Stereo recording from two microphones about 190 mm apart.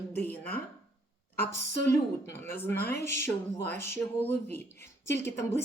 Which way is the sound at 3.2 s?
10° left (ahead or behind).